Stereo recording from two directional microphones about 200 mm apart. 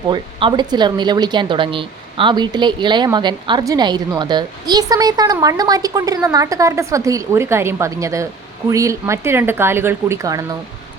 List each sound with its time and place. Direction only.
0.1 s a woman's voice: 25° right (ahead or behind)